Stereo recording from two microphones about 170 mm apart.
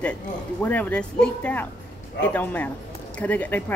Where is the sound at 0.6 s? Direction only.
10° left (ahead or behind).